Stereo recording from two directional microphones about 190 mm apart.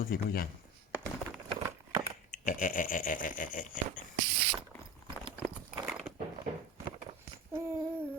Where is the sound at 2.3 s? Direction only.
45° left (ahead or behind).